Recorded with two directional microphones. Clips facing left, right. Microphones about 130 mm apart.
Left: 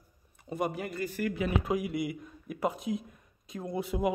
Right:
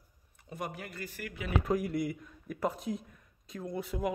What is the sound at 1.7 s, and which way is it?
Speech, 10° left (ahead or behind).